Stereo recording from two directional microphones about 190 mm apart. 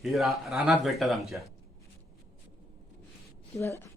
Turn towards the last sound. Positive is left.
turn(degrees=15)  # may be behind; listen again after turning